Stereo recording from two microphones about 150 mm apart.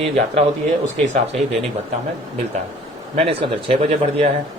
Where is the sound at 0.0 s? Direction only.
45° right (ahead or behind).